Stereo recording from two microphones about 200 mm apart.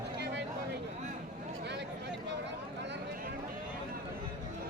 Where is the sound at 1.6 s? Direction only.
60° right (ahead or behind).